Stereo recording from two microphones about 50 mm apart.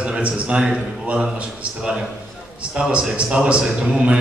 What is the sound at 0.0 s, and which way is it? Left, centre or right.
A man's voice, right.